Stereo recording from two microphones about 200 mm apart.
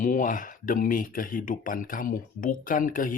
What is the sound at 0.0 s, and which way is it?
Speech, 40° left (ahead or behind).